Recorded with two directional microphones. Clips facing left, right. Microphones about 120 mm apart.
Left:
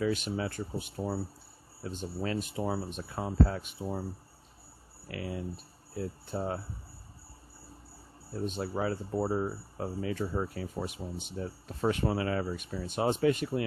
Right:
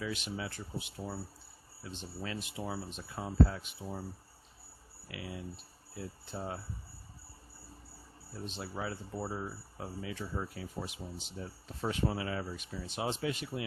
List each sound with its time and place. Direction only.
0.0 s speech: 45° left (ahead or behind)
5.0 s speech: 45° left (ahead or behind)
8.4 s speech: 50° left (ahead or behind)
8.7 s speech: 60° left (ahead or behind)
9.1 s speech: 50° left (ahead or behind)